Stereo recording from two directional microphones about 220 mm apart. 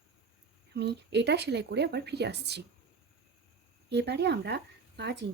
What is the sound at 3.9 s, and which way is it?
Speech, 50° right (ahead or behind).